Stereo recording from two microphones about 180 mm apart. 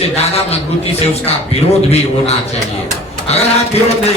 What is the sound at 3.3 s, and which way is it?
Speech, 35° left (ahead or behind).